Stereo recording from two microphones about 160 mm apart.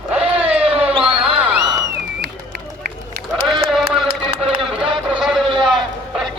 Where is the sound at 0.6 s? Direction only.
35° right (ahead or behind).